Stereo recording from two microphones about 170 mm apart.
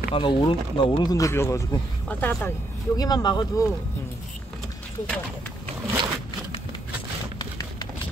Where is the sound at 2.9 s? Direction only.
25° left (ahead or behind).